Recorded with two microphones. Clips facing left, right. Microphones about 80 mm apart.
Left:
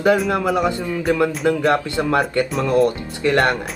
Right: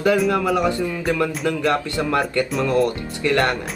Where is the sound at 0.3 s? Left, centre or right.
Left.